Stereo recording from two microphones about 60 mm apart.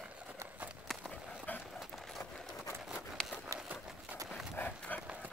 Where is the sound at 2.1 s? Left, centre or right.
Centre.